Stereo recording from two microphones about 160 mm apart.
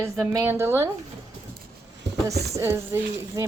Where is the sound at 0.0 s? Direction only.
20° right (ahead or behind).